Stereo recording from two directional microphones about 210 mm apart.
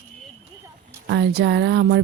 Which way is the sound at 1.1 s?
55° right (ahead or behind).